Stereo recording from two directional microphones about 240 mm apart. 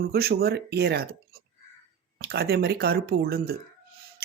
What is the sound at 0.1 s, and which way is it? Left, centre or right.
Speech, right.